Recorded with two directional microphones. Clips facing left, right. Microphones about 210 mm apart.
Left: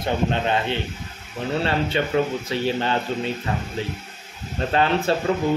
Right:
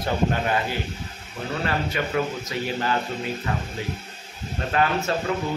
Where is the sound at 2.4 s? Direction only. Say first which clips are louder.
Left 4 dB; 30° left (ahead or behind).